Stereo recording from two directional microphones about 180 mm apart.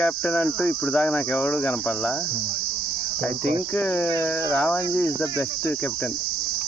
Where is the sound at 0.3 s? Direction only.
5° left (ahead or behind).